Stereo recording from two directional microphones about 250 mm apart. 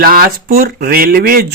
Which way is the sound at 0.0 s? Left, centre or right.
Right.